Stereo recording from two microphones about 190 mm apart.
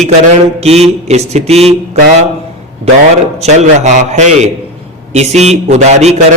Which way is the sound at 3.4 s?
35° right (ahead or behind).